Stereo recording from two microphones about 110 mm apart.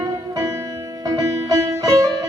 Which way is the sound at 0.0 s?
30° right (ahead or behind).